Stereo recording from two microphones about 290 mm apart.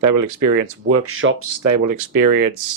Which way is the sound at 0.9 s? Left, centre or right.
Right.